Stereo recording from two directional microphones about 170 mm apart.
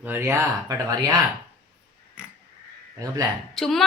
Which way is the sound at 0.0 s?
15° right (ahead or behind).